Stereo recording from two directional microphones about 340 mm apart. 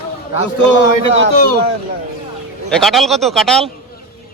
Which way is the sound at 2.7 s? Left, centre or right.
Centre.